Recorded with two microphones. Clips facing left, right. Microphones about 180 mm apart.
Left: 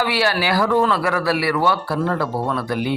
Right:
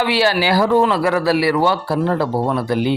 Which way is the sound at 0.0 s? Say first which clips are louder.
Right 3 dB; 25° right (ahead or behind).